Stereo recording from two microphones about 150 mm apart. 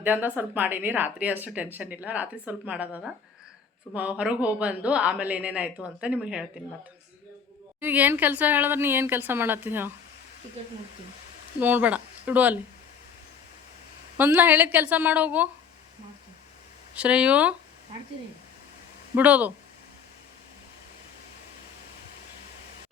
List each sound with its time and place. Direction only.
0.0 s speech: 10° right (ahead or behind)
7.8 s speech: 10° right (ahead or behind)
11.6 s speech: 10° right (ahead or behind)
14.2 s speech: 15° right (ahead or behind)
16.9 s speech: 10° right (ahead or behind)
19.1 s speech: 10° right (ahead or behind)